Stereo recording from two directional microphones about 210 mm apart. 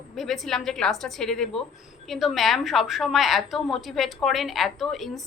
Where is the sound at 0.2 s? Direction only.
Centre (ahead or behind).